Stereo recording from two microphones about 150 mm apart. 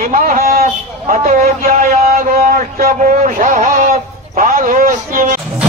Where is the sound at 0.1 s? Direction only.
75° right (ahead or behind).